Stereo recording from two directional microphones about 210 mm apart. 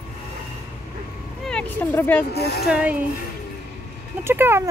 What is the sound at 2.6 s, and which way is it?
Speech, 5° right (ahead or behind).